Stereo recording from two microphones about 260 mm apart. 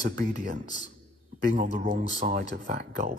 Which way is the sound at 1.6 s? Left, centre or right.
Right.